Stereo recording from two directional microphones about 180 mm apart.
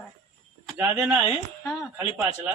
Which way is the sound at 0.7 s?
5° right (ahead or behind).